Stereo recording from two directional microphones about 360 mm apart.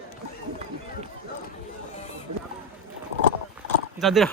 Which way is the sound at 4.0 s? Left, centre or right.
Centre.